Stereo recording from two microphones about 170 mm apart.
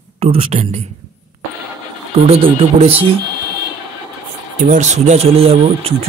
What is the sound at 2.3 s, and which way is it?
Speech, 35° right (ahead or behind).